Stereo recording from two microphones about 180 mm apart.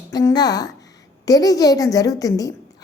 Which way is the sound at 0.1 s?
20° left (ahead or behind).